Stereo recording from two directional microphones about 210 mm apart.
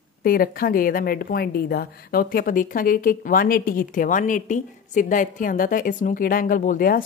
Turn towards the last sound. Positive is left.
turn(degrees=40)  # may be behind; listen again after turning